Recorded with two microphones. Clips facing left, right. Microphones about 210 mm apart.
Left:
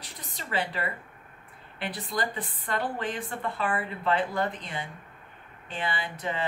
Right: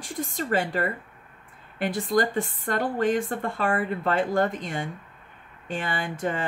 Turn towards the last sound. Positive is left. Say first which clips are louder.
# right 5 dB
turn(degrees=-45)  # may be behind; listen again after turning